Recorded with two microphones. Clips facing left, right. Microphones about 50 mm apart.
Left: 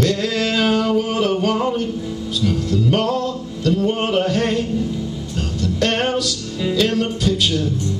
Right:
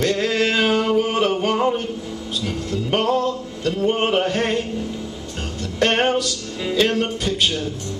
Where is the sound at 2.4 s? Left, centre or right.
Right.